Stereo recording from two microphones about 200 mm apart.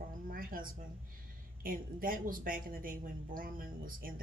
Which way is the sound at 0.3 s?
45° right (ahead or behind).